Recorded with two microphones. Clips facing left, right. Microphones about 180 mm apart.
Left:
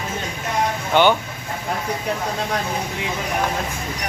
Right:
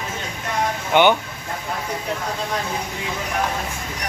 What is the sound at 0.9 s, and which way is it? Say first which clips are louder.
Speech: even; 15° right (ahead or behind).